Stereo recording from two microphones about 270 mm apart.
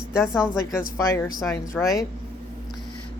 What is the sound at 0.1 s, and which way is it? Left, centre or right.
Speech, centre.